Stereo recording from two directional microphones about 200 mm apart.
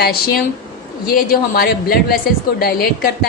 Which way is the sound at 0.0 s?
50° left (ahead or behind).